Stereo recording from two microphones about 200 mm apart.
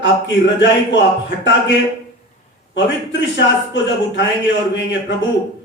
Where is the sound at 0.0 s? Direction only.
65° left (ahead or behind).